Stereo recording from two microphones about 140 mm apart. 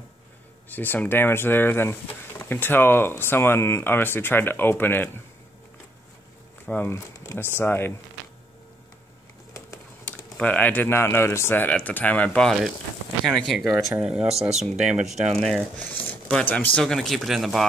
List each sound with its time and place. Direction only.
0.7 s speech: 15° left (ahead or behind)
6.6 s speech: 15° left (ahead or behind)
10.0 s speech: 10° left (ahead or behind)
15.8 s speech: 10° left (ahead or behind)